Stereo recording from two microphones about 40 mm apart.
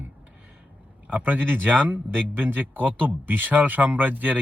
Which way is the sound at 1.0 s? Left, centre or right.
Right.